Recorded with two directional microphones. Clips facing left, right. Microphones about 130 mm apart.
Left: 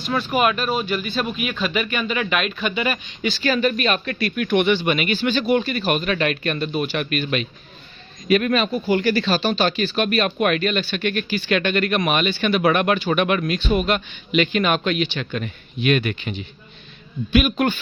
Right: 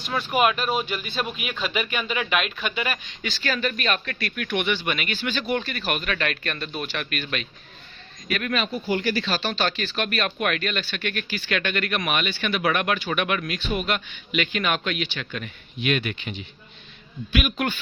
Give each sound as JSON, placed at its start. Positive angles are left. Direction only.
{"t": 0.2, "sound": "speech", "side_deg": -10}
{"t": 3.2, "sound": "speech", "side_deg": 15}
{"t": 5.8, "sound": "speech", "side_deg": 25}
{"t": 8.7, "sound": "speech", "side_deg": 65}
{"t": 9.4, "sound": "speech", "side_deg": 15}
{"t": 17.3, "sound": "a man's voice", "side_deg": 30}